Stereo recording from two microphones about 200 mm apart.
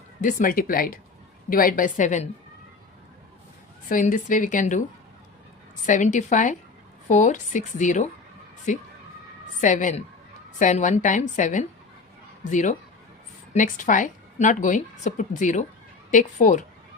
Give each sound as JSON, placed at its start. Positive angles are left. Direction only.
{"t": 0.2, "sound": "a woman's voice", "side_deg": 40}
{"t": 3.8, "sound": "a woman's voice", "side_deg": 40}
{"t": 5.8, "sound": "a woman's voice", "side_deg": 40}